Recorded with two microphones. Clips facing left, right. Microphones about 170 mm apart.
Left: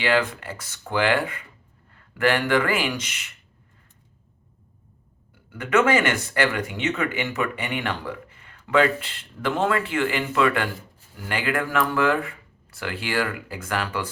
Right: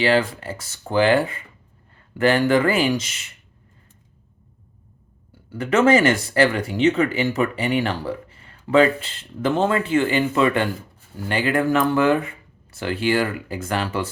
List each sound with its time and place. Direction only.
0.0 s speech: 30° right (ahead or behind)
5.5 s speech: 30° right (ahead or behind)